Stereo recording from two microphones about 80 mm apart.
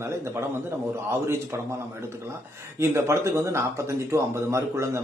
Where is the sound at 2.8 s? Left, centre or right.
Right.